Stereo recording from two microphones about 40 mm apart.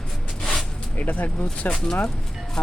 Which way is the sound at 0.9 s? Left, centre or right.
Left.